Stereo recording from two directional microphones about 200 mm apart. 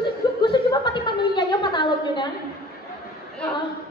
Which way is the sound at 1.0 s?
25° left (ahead or behind).